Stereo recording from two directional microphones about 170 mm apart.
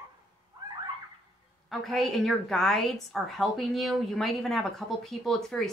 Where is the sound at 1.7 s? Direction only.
Centre (ahead or behind).